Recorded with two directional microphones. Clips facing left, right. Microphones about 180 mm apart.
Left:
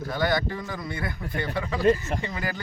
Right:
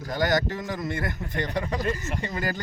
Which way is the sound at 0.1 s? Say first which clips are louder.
Right 2 dB; 45° right (ahead or behind).